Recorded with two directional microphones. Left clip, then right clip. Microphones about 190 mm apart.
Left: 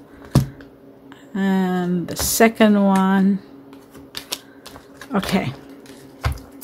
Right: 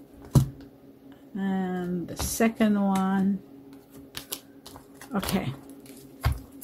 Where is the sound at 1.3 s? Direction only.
30° left (ahead or behind).